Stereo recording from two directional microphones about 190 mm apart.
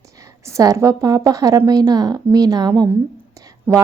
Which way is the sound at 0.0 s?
15° right (ahead or behind).